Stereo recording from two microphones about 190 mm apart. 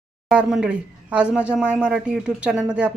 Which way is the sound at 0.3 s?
5° right (ahead or behind).